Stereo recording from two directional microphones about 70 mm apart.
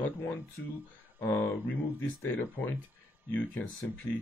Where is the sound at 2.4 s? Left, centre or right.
Left.